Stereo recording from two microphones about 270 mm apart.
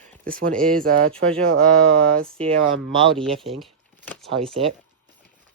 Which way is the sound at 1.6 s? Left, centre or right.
Right.